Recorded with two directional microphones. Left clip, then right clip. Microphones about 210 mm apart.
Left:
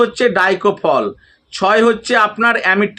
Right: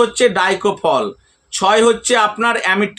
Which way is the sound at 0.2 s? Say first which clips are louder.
Left 1 dB; 20° right (ahead or behind).